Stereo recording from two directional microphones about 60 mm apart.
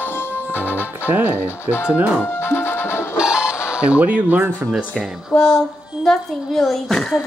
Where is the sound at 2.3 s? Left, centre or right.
Left.